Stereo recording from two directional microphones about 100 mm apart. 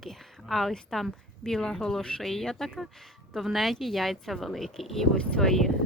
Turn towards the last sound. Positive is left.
turn(degrees=5)  # may be behind; listen again after turning